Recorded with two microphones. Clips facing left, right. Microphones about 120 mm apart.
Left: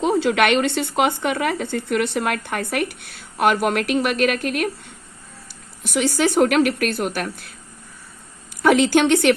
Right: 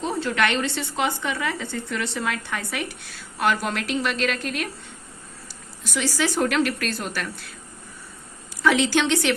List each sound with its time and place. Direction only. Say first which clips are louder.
0.0 s speech: left 6 dB; 75° left (ahead or behind); by 4.7 s 55° left (ahead or behind)
5.8 s speech: left 5 dB; 55° left (ahead or behind)
8.6 s a woman's voice: left 5 dB; 50° left (ahead or behind)